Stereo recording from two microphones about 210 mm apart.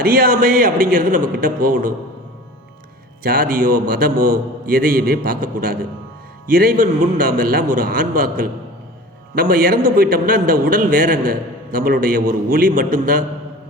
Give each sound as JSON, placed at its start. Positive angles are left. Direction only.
{"t": 0.0, "sound": "a man's voice", "side_deg": -45}
{"t": 3.2, "sound": "a man's voice", "side_deg": -40}